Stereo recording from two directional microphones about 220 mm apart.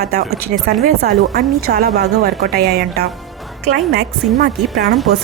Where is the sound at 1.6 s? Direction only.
45° right (ahead or behind).